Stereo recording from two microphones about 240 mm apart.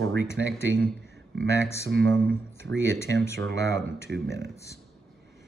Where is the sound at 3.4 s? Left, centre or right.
Right.